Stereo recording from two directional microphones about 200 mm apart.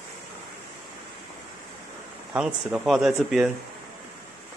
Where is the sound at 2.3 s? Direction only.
5° right (ahead or behind).